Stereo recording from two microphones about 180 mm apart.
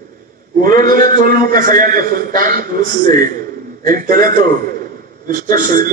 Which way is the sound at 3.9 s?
50° right (ahead or behind).